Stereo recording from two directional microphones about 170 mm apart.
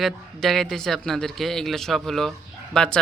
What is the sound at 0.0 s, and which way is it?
A man's voice, centre (ahead or behind).